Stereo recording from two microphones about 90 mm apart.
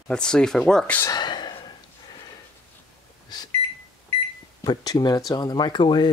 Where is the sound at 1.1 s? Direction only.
55° left (ahead or behind).